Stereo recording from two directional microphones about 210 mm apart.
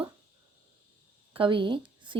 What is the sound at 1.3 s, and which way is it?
Speech, 25° right (ahead or behind).